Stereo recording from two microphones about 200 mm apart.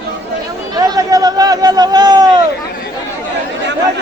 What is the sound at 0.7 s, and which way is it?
Speech, 20° right (ahead or behind).